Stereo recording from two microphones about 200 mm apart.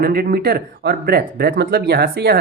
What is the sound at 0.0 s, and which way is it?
Speech, 50° right (ahead or behind).